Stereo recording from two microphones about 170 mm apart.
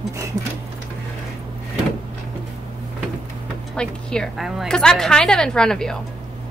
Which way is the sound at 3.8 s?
5° left (ahead or behind).